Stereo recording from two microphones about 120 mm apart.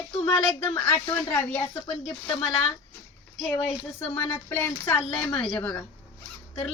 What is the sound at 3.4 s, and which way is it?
Speech, 5° left (ahead or behind).